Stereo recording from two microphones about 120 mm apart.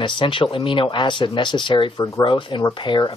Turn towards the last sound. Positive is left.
turn(degrees=40)  # may be behind; listen again after turning